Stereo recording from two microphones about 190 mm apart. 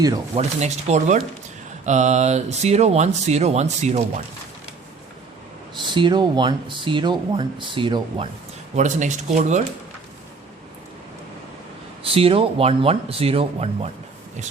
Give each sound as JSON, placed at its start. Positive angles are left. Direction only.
{"t": 0.3, "sound": "speech", "side_deg": -35}
{"t": 5.8, "sound": "speech", "side_deg": -25}
{"t": 8.7, "sound": "speech", "side_deg": -40}
{"t": 12.1, "sound": "speech", "side_deg": -30}